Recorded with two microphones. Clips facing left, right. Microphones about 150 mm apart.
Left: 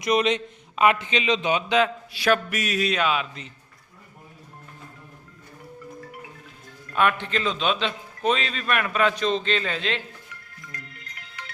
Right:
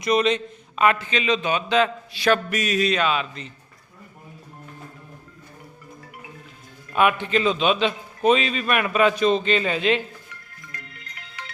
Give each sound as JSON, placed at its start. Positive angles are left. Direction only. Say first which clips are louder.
{"t": 0.0, "sound": "a man's voice", "louder": "right 2 dB", "side_deg": 15}
{"t": 1.7, "sound": "a man's voice", "louder": "right 1 dB", "side_deg": 10}
{"t": 6.9, "sound": "a man's voice", "louder": "right 3 dB", "side_deg": -10}